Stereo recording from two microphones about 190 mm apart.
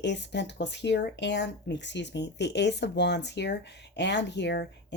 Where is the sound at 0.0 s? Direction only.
65° left (ahead or behind).